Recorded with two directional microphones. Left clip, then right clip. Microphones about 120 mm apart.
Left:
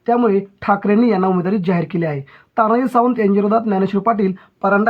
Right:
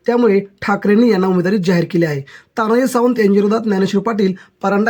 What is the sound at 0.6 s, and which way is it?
Speech, 55° right (ahead or behind).